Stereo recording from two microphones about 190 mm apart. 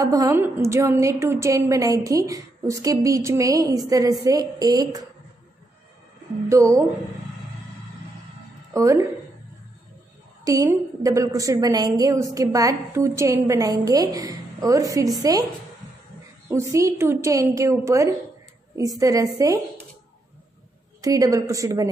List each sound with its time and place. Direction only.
0.0 s a woman's voice: 20° right (ahead or behind)
6.5 s a woman's voice: 15° right (ahead or behind)
8.7 s a woman's voice: 15° right (ahead or behind)
10.4 s a woman's voice: 15° right (ahead or behind)
16.4 s a woman's voice: 15° right (ahead or behind)
21.0 s a woman's voice: 20° right (ahead or behind)